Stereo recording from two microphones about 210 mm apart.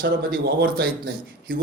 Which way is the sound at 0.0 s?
50° right (ahead or behind).